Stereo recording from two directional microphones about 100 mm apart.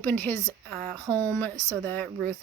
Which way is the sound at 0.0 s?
15° left (ahead or behind).